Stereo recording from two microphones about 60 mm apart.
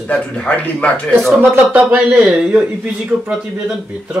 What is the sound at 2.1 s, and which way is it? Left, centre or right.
Speech, centre.